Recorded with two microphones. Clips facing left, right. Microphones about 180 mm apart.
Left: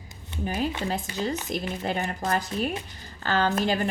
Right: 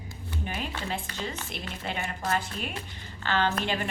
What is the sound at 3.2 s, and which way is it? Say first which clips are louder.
Speech: left 3 dB; 40° left (ahead or behind).